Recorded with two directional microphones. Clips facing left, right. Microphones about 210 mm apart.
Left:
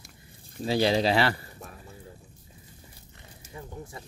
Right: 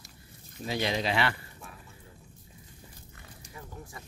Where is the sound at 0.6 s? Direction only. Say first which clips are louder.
Left 7 dB; 30° left (ahead or behind).